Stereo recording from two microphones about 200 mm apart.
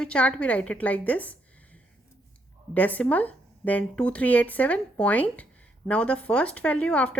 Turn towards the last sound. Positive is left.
turn(degrees=5)  # may be behind; listen again after turning